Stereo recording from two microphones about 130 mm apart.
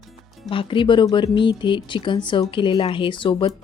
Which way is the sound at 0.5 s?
40° left (ahead or behind).